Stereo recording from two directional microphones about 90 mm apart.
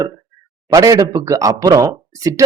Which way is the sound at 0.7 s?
40° right (ahead or behind).